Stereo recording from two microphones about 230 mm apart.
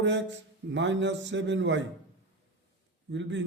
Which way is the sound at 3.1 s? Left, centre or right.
Right.